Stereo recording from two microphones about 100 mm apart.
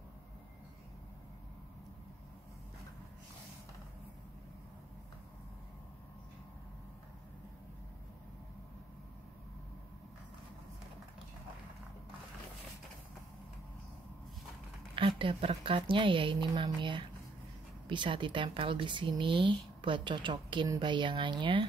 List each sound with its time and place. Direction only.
15.0 s speech: 60° right (ahead or behind)